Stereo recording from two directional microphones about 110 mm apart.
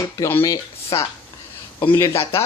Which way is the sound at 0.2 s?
20° left (ahead or behind).